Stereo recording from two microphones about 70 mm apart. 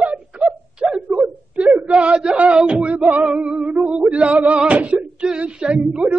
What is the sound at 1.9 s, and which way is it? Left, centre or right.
Music, centre.